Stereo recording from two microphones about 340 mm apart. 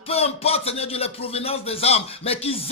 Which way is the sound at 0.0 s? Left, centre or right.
Centre.